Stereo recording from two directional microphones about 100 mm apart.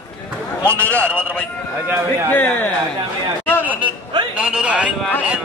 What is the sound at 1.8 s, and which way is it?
Speech, 30° right (ahead or behind).